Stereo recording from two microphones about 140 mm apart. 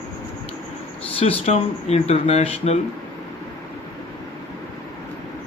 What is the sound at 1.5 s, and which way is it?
Speech, 50° left (ahead or behind).